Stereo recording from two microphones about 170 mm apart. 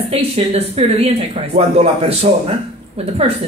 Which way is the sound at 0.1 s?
35° right (ahead or behind).